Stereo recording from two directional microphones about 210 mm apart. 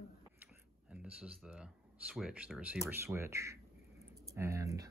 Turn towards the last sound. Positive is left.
turn(degrees=-15)  # may be behind; listen again after turning